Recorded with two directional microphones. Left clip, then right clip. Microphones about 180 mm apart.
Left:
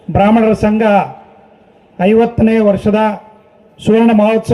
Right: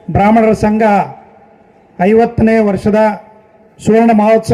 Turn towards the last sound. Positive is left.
turn(degrees=-45)  # may be behind; listen again after turning